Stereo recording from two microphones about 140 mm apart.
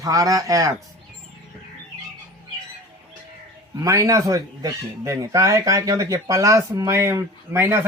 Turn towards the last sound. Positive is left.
turn(degrees=-15)  # may be behind; listen again after turning